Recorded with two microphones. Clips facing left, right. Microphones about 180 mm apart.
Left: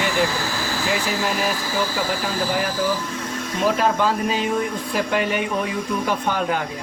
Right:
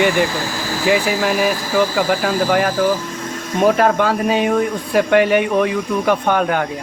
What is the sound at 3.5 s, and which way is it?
Speech, 60° right (ahead or behind).